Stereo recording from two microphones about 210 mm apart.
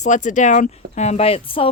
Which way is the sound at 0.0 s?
35° left (ahead or behind).